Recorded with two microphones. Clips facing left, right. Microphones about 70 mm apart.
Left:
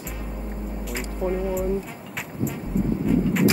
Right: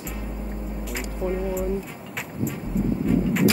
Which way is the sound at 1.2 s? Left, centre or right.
Left.